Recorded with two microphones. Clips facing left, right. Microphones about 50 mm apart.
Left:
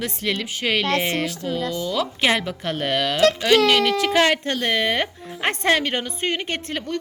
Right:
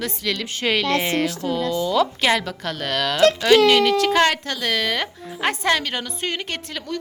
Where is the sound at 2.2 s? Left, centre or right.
Centre.